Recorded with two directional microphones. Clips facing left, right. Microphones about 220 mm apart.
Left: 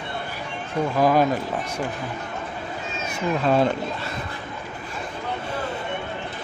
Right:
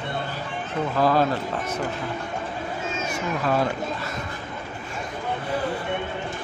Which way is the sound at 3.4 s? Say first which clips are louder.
Left 4 dB; 25° left (ahead or behind).